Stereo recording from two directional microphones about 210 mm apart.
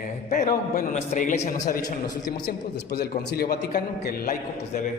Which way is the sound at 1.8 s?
20° left (ahead or behind).